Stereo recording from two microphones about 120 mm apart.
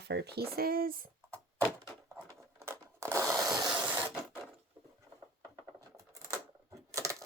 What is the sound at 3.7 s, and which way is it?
Printer, 10° right (ahead or behind).